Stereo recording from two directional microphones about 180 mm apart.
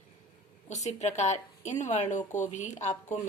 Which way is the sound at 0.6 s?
40° left (ahead or behind).